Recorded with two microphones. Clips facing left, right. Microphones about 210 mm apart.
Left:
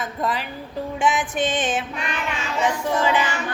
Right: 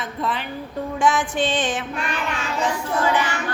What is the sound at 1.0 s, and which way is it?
Music, 20° left (ahead or behind).